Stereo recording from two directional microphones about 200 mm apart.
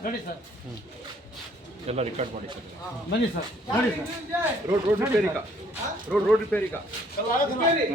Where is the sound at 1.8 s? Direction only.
35° right (ahead or behind).